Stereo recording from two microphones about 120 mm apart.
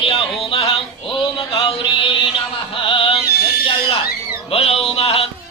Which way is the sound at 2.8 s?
50° left (ahead or behind).